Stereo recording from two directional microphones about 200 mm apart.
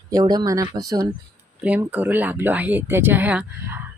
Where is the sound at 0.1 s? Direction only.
20° right (ahead or behind).